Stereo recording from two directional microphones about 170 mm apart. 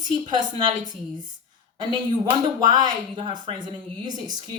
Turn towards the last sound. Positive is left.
turn(degrees=-25)  # may be behind; listen again after turning